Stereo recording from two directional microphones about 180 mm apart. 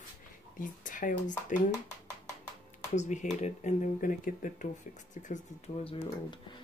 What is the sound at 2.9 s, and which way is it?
Speech, 40° left (ahead or behind).